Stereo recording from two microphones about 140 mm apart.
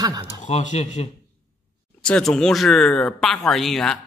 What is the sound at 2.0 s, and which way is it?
Speech, 5° left (ahead or behind).